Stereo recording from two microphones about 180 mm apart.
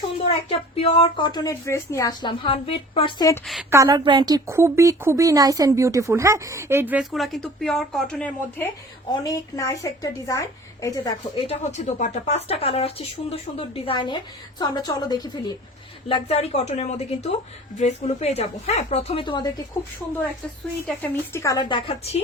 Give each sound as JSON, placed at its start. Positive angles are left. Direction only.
{"t": 0.4, "sound": "speech", "side_deg": 30}
{"t": 3.4, "sound": "a woman's voice", "side_deg": 0}
{"t": 3.7, "sound": "speech", "side_deg": -15}
{"t": 9.3, "sound": "a woman's voice", "side_deg": 15}
{"t": 11.4, "sound": "speech", "side_deg": 40}
{"t": 16.0, "sound": "speech", "side_deg": 35}
{"t": 20.8, "sound": "speech", "side_deg": 10}